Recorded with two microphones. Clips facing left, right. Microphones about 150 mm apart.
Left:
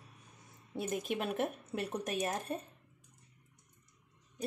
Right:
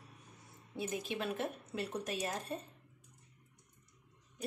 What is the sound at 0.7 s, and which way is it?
Speech, 50° left (ahead or behind).